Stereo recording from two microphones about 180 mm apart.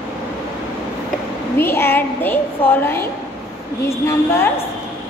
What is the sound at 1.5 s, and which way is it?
A woman's voice, 15° left (ahead or behind).